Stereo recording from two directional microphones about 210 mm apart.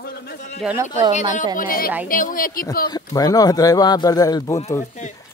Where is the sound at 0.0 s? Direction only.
50° left (ahead or behind).